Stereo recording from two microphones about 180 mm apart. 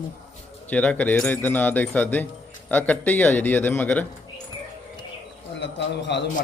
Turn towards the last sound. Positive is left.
turn(degrees=75)  # may be behind; listen again after turning